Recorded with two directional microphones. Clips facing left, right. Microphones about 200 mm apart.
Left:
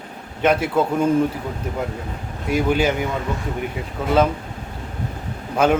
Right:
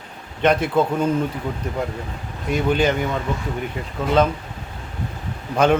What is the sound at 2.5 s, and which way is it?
Speech, 10° left (ahead or behind).